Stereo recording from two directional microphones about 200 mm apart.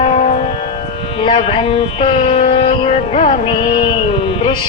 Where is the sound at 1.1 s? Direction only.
30° left (ahead or behind).